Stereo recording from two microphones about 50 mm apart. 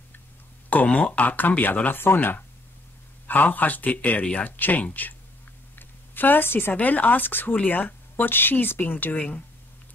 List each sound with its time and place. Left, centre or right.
0.8 s speech: left
1.9 s speech: left
3.3 s speech: left
5.8 s a sound: left
6.8 s speech: left